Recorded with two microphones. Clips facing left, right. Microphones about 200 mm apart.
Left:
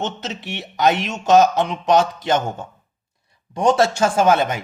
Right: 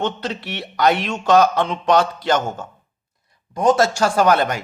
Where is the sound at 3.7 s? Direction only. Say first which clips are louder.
Even; 25° left (ahead or behind).